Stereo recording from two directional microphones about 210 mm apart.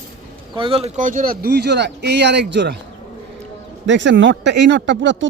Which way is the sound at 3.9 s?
60° right (ahead or behind).